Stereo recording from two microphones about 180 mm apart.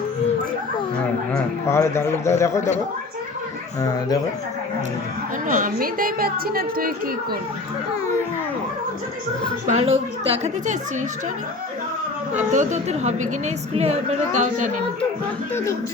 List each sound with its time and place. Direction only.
1.3 s a man's voice: 15° left (ahead or behind)
3.8 s speech: 20° left (ahead or behind)
5.5 s speech: 50° right (ahead or behind)
9.6 s a woman's voice: 35° right (ahead or behind)
12.5 s a woman's voice: 40° right (ahead or behind)